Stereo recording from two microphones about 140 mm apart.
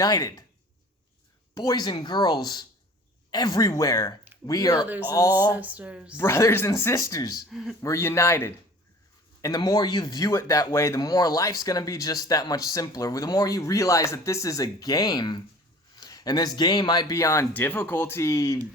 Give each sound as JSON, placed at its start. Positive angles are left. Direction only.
{"t": 0.0, "sound": "speech", "side_deg": 25}
{"t": 1.5, "sound": "speech", "side_deg": 25}
{"t": 4.8, "sound": "a sound", "side_deg": -10}
{"t": 6.1, "sound": "speech", "side_deg": 20}
{"t": 7.5, "sound": "speech", "side_deg": 0}
{"t": 7.8, "sound": "speech", "side_deg": 20}